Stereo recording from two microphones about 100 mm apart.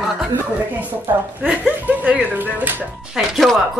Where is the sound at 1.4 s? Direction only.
15° right (ahead or behind).